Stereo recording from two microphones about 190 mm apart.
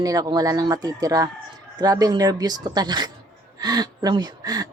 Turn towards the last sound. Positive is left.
turn(degrees=-20)  # may be behind; listen again after turning